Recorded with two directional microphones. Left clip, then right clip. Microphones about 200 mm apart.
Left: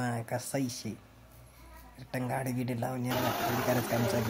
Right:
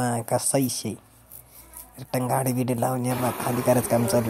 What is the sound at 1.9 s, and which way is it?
Speech, 30° right (ahead or behind).